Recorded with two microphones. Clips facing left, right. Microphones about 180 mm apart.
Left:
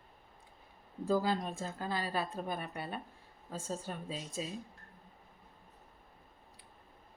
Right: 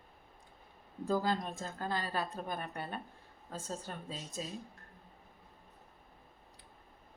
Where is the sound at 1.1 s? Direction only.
10° left (ahead or behind).